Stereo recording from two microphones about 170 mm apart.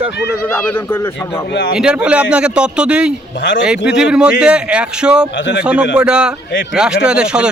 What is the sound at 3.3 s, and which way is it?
Speech, 90° left.